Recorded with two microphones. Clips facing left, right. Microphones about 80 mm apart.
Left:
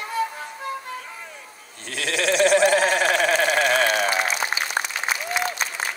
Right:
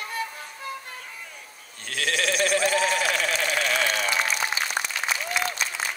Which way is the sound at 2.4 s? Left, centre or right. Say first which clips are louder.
Left 8 dB; left.